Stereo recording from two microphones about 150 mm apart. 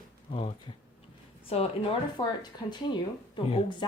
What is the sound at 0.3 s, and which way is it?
Speech, 40° left (ahead or behind).